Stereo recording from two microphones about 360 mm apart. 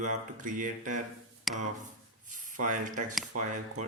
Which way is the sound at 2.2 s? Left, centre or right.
Right.